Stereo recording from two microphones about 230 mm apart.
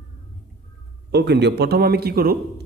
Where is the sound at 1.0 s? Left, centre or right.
Right.